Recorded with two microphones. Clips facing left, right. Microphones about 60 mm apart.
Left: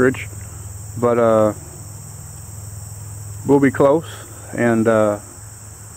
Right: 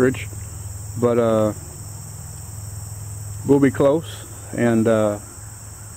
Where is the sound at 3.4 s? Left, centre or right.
Centre.